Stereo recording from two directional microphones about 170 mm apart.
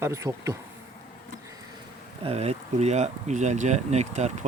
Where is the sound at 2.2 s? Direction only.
40° right (ahead or behind).